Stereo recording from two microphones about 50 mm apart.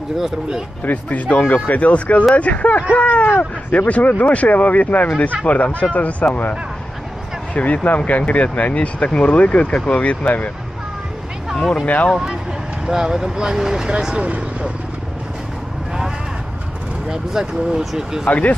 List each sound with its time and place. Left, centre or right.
0.8 s speech: left
7.5 s speech: left
10.2 s speech: left
11.5 s speech: centre
11.8 s speech: left
12.8 s speech: centre
17.1 s speech: centre
18.2 s speech: left